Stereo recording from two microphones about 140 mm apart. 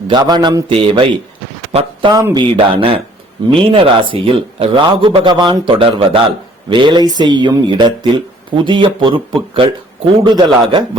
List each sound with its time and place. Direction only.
0.1 s speech: 30° right (ahead or behind)